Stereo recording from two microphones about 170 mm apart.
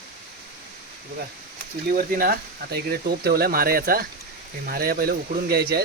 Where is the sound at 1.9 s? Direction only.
60° right (ahead or behind).